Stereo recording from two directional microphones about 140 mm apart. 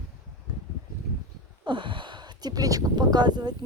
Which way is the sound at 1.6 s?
35° right (ahead or behind).